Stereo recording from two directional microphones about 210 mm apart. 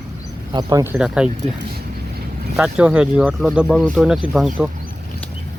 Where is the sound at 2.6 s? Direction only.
5° right (ahead or behind).